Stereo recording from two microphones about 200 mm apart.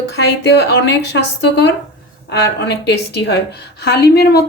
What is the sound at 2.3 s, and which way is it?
A woman's voice, 60° left (ahead or behind).